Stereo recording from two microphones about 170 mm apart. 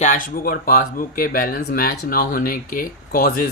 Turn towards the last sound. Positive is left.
turn(degrees=55)  # may be behind; listen again after turning